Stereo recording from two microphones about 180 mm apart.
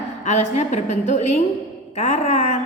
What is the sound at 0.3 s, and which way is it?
A woman's voice, 40° left (ahead or behind).